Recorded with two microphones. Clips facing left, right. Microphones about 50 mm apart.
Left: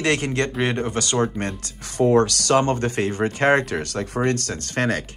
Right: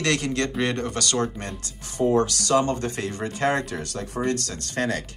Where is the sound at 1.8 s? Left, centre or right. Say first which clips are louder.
Left 4 dB; left.